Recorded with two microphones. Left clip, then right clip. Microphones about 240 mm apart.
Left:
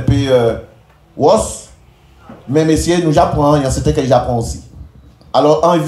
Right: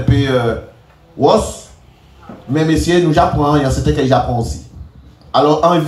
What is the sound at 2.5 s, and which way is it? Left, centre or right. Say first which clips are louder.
A man's voice: left 1 dB; left.